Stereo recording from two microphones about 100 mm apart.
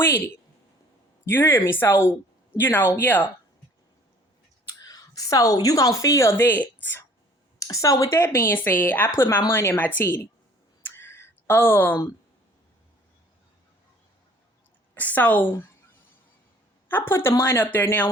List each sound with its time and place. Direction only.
1.2 s speech: 25° left (ahead or behind)
4.9 s a woman's voice: 40° left (ahead or behind); by 7.0 s 20° left (ahead or behind)
7.6 s speech: 35° left (ahead or behind)
10.9 s a sound: 25° left (ahead or behind)
14.9 s a woman's voice: 15° left (ahead or behind)
16.9 s speech: 25° left (ahead or behind)